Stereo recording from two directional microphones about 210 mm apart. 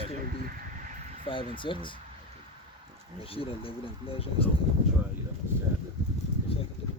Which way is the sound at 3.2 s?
25° left (ahead or behind).